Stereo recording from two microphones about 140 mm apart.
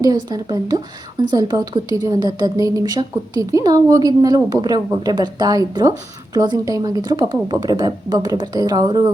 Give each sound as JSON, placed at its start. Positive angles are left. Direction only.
{"t": 0.0, "sound": "a woman's voice", "side_deg": -25}